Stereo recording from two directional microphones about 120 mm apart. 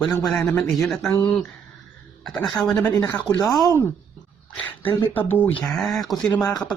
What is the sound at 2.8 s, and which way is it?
Speech, 30° left (ahead or behind).